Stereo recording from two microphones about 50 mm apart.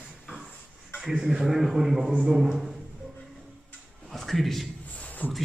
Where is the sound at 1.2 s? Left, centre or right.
Centre.